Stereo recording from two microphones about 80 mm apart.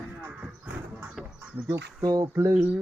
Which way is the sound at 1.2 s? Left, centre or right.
Centre.